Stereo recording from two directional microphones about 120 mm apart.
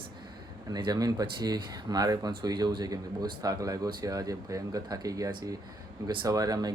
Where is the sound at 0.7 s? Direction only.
30° right (ahead or behind).